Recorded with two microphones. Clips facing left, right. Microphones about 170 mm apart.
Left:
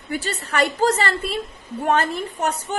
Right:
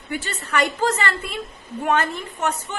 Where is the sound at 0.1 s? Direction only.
40° left (ahead or behind).